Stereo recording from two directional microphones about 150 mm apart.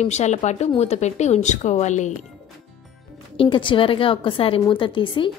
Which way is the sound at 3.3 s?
35° left (ahead or behind).